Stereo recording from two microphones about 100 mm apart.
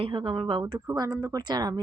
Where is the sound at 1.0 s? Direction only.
40° right (ahead or behind).